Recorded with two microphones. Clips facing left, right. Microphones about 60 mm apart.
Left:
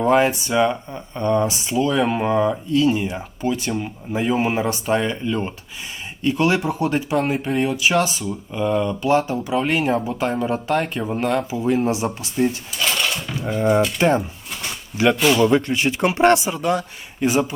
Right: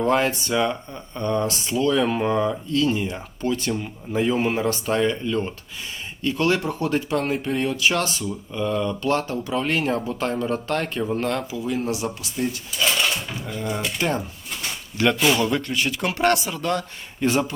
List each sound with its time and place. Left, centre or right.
0.0 s speech: centre
11.5 s speech: left
13.4 s speech: left
14.0 s speech: left
14.9 s speech: centre
15.4 s speech: left